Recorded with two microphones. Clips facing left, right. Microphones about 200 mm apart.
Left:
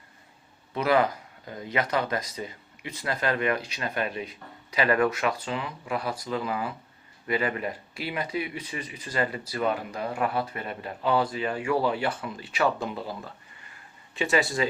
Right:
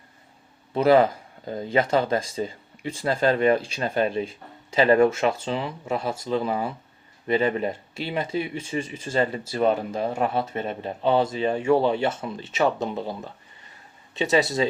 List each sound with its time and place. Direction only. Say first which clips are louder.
0.7 s speech: right 6 dB; 30° right (ahead or behind)